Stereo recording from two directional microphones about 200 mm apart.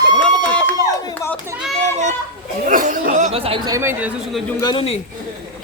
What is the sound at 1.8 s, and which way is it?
Children playing, 35° right (ahead or behind).